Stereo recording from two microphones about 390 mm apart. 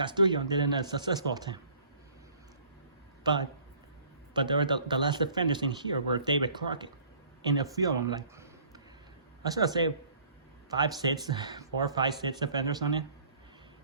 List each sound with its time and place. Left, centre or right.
0.0 s speech: centre
4.4 s speech: centre